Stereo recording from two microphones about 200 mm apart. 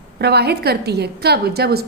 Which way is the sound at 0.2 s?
55° right (ahead or behind).